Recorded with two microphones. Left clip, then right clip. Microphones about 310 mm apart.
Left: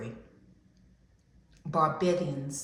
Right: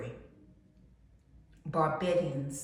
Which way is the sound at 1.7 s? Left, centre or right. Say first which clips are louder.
Left 2 dB; centre.